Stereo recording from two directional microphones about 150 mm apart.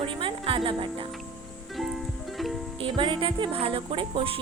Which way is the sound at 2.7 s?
35° right (ahead or behind).